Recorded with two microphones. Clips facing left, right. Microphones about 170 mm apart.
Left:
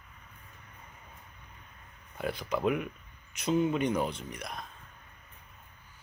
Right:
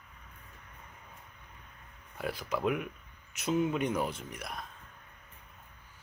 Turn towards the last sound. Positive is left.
turn(degrees=-5)  # may be behind; listen again after turning